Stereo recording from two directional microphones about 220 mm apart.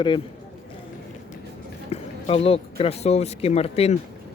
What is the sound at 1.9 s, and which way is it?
Speech, 25° left (ahead or behind).